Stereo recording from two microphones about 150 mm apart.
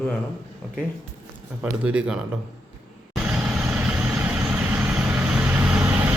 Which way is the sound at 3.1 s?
5° right (ahead or behind).